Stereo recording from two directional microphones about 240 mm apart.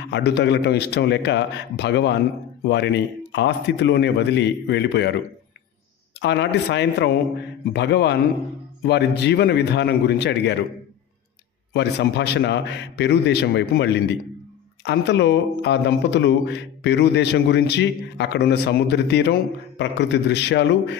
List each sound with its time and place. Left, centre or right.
0.0 s a man's voice: left
6.2 s a man's voice: left
11.7 s a man's voice: left